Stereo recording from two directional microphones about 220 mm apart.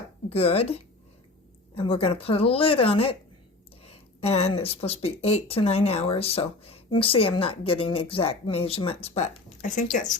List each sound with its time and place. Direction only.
0.3 s speech: 25° left (ahead or behind)